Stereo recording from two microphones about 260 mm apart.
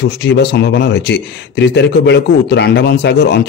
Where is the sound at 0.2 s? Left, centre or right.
Left.